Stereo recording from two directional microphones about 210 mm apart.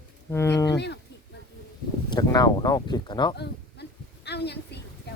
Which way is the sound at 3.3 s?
50° left (ahead or behind).